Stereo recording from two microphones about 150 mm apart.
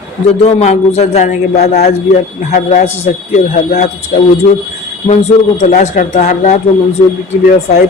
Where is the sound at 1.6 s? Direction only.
90° left.